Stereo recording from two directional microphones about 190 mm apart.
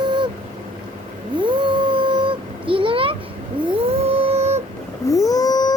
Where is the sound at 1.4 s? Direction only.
25° right (ahead or behind).